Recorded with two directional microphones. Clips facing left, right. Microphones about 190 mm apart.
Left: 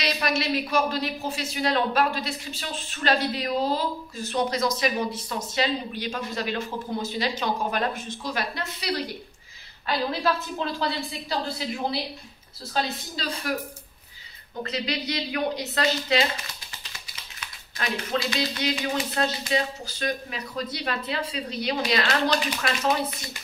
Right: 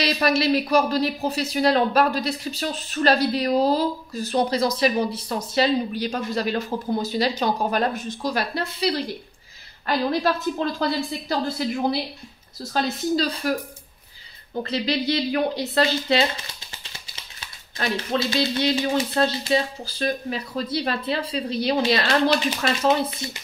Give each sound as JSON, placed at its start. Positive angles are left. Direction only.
{"t": 0.0, "sound": "speech", "side_deg": -35}
{"t": 9.8, "sound": "a woman's voice", "side_deg": -45}
{"t": 12.8, "sound": "speech", "side_deg": -40}
{"t": 14.6, "sound": "speech", "side_deg": -30}